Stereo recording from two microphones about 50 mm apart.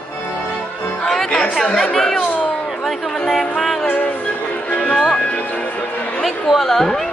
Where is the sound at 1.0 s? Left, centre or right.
Centre.